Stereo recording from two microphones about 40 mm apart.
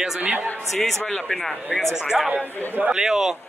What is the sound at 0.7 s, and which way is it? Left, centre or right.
Speech, centre.